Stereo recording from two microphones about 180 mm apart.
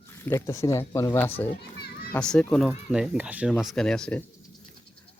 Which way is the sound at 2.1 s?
5° left (ahead or behind).